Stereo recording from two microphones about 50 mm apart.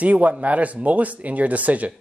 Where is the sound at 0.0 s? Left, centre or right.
Right.